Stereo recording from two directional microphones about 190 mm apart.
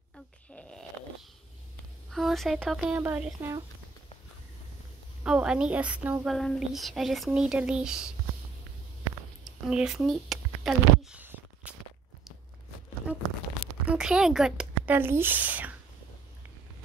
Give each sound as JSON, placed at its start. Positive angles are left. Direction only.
{"t": 0.5, "sound": "snoring", "side_deg": 5}
{"t": 2.0, "sound": "speech", "side_deg": 0}
{"t": 3.0, "sound": "speech", "side_deg": -10}
{"t": 5.2, "sound": "a woman's voice", "side_deg": -5}
{"t": 9.4, "sound": "a sound", "side_deg": -5}
{"t": 13.0, "sound": "tearing", "side_deg": -5}
{"t": 13.8, "sound": "speech", "side_deg": -5}